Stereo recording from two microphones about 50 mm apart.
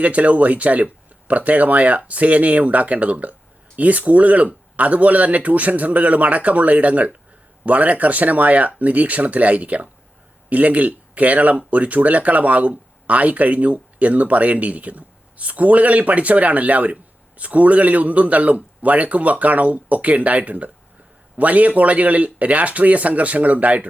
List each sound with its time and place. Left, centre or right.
0.0 s speech: right